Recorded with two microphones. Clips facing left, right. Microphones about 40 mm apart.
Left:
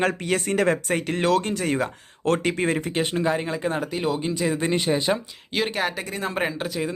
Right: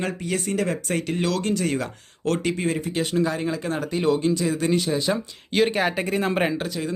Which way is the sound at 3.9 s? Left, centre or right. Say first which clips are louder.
Right 4 dB; centre.